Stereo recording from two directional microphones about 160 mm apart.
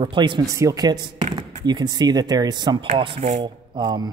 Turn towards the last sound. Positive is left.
turn(degrees=-25)  # may be behind; listen again after turning